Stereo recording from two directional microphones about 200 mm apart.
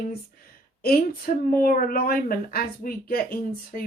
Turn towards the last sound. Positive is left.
turn(degrees=45)  # may be behind; listen again after turning